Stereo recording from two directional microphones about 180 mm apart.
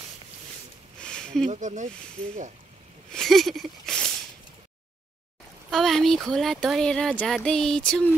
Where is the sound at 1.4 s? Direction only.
45° right (ahead or behind).